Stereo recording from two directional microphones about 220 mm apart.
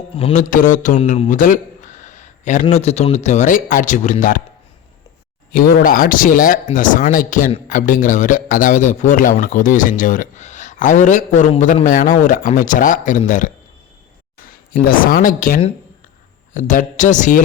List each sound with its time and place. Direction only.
0.2 s speech: 30° left (ahead or behind)
5.5 s speech: 40° left (ahead or behind)
14.7 s speech: 40° left (ahead or behind)